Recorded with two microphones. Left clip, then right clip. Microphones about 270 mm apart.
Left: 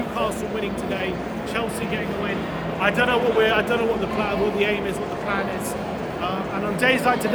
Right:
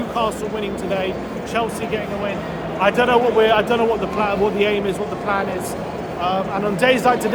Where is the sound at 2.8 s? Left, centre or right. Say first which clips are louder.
Right 5 dB; centre.